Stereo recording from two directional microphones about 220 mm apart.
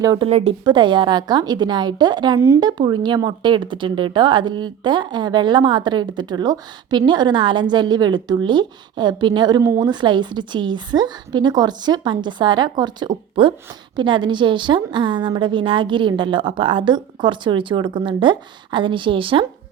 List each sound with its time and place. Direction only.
0.0 s speech: 15° right (ahead or behind)
0.3 s a woman's voice: 25° right (ahead or behind)